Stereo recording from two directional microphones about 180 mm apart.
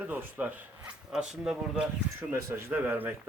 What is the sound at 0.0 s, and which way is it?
Speech, 10° right (ahead or behind).